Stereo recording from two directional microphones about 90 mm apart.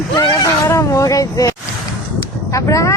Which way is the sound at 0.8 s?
35° left (ahead or behind).